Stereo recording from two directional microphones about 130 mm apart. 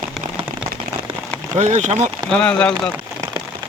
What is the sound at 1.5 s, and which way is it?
Speech, 65° right (ahead or behind).